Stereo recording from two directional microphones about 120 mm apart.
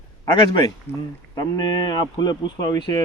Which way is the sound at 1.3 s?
35° left (ahead or behind).